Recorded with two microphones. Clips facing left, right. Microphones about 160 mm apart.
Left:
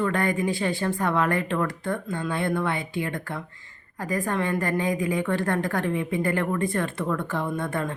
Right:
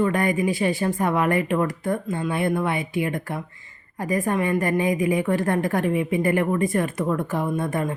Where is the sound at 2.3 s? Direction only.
20° right (ahead or behind).